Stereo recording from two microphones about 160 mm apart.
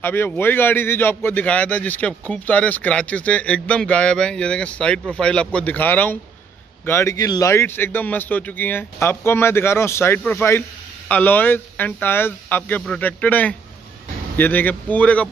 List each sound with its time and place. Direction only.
0.0 s a man's voice: 15° left (ahead or behind)